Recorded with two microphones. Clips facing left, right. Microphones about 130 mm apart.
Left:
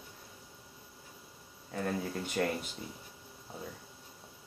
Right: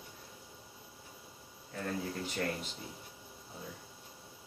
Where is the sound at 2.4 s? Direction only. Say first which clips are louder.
Left 4 dB; 75° left (ahead or behind).